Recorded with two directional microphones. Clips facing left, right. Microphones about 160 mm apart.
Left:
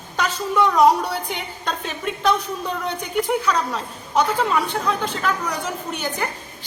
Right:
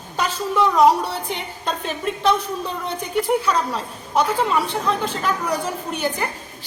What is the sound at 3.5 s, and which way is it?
A woman's voice, 5° right (ahead or behind).